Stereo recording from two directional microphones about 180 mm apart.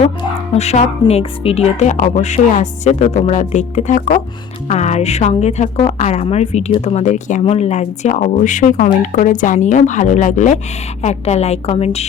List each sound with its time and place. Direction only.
0.5 s speech: 35° left (ahead or behind)